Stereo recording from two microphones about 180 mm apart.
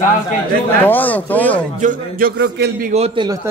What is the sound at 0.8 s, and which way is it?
Speech, 10° left (ahead or behind).